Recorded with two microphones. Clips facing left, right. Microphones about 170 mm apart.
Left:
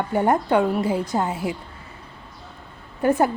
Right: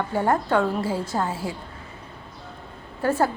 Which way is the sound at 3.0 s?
15° left (ahead or behind).